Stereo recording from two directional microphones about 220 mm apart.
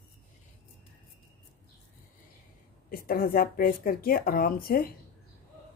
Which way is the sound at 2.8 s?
40° left (ahead or behind).